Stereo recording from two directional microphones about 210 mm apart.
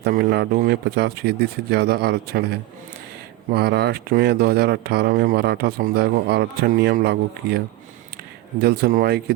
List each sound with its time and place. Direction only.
0.0 s speech: 50° right (ahead or behind)
8.6 s speech: 50° right (ahead or behind)